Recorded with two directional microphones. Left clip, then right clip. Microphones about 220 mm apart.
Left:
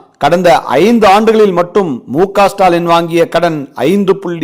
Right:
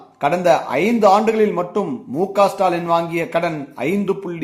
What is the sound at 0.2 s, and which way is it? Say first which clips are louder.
A man's voice: left 8 dB; 50° left (ahead or behind).